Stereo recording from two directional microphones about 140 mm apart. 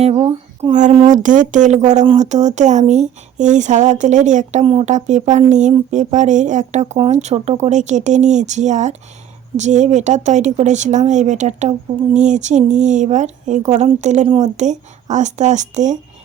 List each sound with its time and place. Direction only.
0.0 s speech: 40° right (ahead or behind)
0.7 s speech: 60° right (ahead or behind)
4.6 s speech: 40° right (ahead or behind)
4.9 s speech: 60° right (ahead or behind)